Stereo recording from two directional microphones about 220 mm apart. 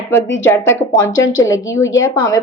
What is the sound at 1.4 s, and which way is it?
Speech, 15° left (ahead or behind).